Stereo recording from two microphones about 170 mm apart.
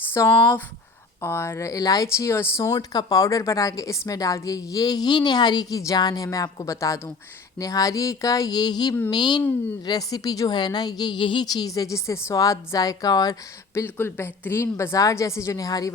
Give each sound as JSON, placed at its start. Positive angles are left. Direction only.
{"t": 0.1, "sound": "a woman's voice", "side_deg": 15}